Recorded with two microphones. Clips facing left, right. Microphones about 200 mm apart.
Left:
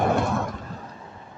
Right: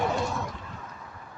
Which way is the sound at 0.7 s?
35° left (ahead or behind).